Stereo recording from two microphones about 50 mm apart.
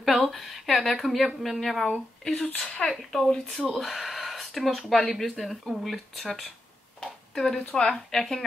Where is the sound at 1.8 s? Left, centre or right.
Centre.